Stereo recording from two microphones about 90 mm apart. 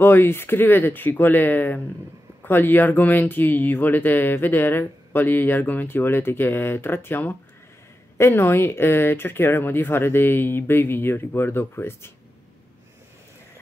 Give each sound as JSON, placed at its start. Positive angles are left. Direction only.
{"t": 0.0, "sound": "speech", "side_deg": 25}